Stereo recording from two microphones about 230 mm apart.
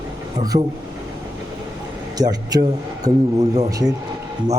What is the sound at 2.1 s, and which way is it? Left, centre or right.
Speech, centre.